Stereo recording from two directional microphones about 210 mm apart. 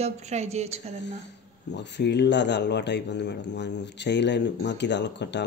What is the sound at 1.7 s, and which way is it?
A man's voice, 55° left (ahead or behind).